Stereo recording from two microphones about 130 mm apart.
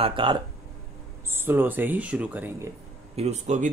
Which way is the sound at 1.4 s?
15° right (ahead or behind).